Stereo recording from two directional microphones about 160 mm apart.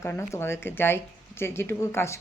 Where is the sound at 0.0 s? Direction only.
15° left (ahead or behind).